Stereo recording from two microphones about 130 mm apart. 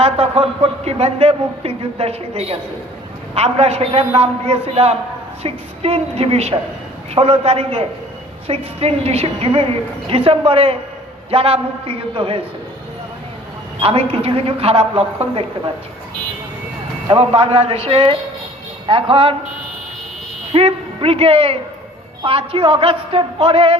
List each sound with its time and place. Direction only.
0.0 s a man's voice: 50° right (ahead or behind)
13.8 s a man's voice: 45° right (ahead or behind)
17.1 s a man's voice: 50° right (ahead or behind)
20.5 s a man's voice: 45° right (ahead or behind)